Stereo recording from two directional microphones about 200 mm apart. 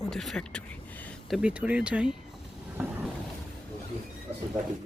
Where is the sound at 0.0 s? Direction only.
Centre (ahead or behind).